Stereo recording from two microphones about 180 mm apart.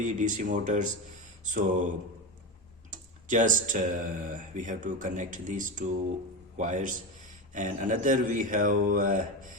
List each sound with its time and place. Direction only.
0.0 s speech: 45° right (ahead or behind)
3.2 s speech: 45° right (ahead or behind)